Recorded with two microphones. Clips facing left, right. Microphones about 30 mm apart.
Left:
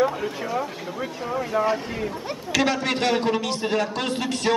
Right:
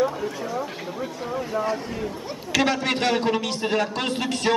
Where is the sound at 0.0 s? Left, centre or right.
Centre.